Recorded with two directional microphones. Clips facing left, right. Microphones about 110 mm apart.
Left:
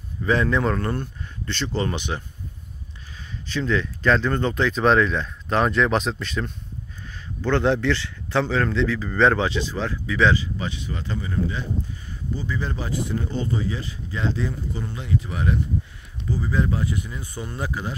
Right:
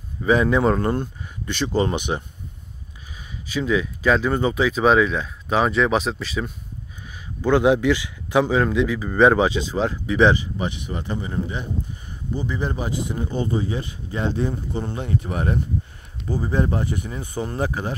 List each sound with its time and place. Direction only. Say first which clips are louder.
0.2 s speech: right 3 dB; 15° right (ahead or behind)
3.4 s a man's voice: right 2 dB; 10° right (ahead or behind)
14.2 s speech: right 3 dB; 50° right (ahead or behind)
14.5 s speech: right 4 dB; 25° right (ahead or behind)
15.0 s speech: left 1 dB; 50° right (ahead or behind)
16.3 s speech: right 1 dB; 30° right (ahead or behind)
16.7 s speech: right 1 dB; 50° right (ahead or behind)